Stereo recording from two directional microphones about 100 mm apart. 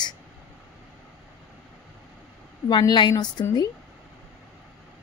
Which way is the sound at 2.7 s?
50° left (ahead or behind).